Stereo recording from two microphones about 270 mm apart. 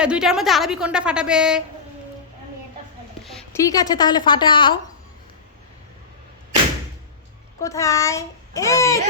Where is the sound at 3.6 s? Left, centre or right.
Centre.